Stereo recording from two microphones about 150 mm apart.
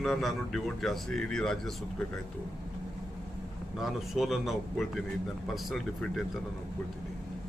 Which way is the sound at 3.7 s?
Centre (ahead or behind).